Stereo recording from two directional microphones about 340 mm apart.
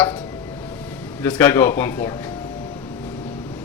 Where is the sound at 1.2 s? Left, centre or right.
Centre.